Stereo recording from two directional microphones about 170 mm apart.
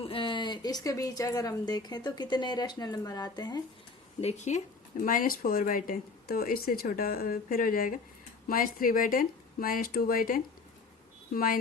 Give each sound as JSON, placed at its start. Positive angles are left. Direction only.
{"t": 0.0, "sound": "speech", "side_deg": 30}
{"t": 4.2, "sound": "speech", "side_deg": 40}
{"t": 5.0, "sound": "speech", "side_deg": 55}